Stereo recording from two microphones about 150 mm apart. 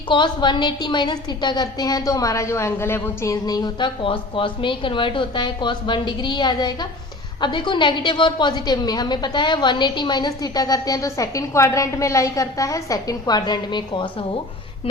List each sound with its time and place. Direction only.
0.1 s a woman's voice: 30° left (ahead or behind)